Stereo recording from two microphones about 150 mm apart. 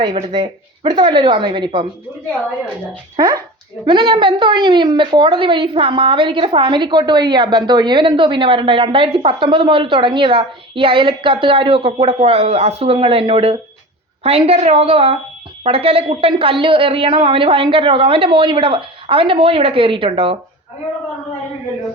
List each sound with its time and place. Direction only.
0.1 s a woman's voice: 40° right (ahead or behind)
3.2 s a woman's voice: 25° right (ahead or behind)